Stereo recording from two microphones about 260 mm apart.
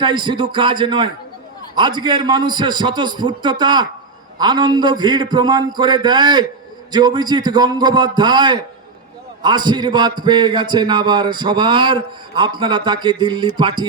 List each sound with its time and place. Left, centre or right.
0.0 s a man's voice: centre